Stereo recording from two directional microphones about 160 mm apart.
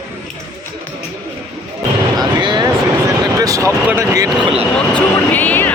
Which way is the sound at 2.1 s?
30° right (ahead or behind).